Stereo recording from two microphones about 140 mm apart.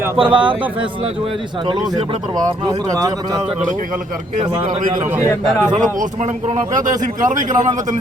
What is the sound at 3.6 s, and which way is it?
Speech, 75° right (ahead or behind).